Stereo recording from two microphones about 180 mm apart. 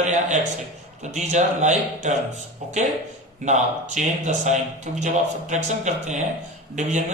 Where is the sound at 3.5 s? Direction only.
40° right (ahead or behind).